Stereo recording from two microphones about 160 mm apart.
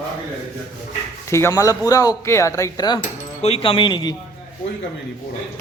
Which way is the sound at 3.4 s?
35° left (ahead or behind).